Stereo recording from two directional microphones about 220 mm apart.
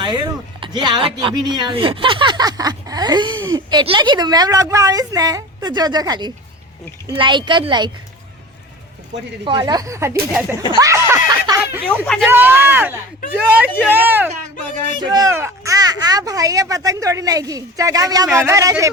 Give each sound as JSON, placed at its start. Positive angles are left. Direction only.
{"t": 0.0, "sound": "speech", "side_deg": -20}
{"t": 9.4, "sound": "speech", "side_deg": -20}
{"t": 10.8, "sound": "snicker", "side_deg": -15}
{"t": 12.0, "sound": "speech", "side_deg": 5}
{"t": 12.3, "sound": "speech", "side_deg": -10}